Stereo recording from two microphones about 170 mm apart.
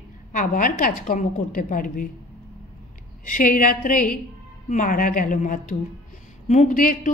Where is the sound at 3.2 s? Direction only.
50° left (ahead or behind).